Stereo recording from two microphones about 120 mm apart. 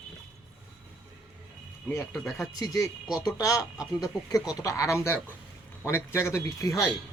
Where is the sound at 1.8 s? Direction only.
20° left (ahead or behind).